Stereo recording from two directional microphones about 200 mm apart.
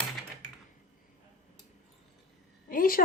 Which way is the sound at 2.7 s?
45° left (ahead or behind).